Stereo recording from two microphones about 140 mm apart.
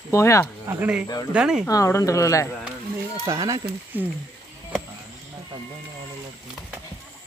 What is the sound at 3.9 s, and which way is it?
Speech, 15° right (ahead or behind).